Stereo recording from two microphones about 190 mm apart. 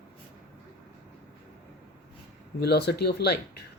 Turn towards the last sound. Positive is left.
turn(degrees=60)  # may be behind; listen again after turning